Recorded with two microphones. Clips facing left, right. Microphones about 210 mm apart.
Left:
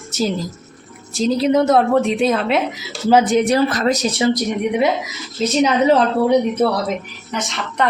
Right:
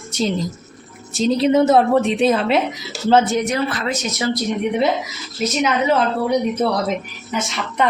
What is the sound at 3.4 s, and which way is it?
Speech, 40° left (ahead or behind).